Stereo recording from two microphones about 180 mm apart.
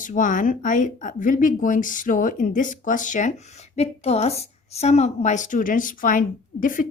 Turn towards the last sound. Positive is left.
turn(degrees=50)  # may be behind; listen again after turning